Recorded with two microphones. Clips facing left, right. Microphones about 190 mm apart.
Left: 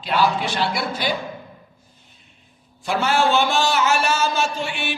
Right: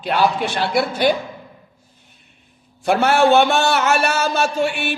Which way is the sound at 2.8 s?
60° right (ahead or behind).